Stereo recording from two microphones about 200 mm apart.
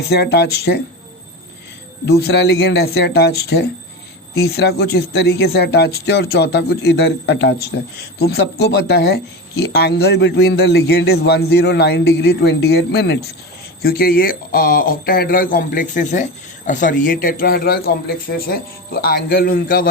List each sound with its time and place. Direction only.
0.1 s speech: 55° left (ahead or behind)
2.0 s speech: 55° left (ahead or behind)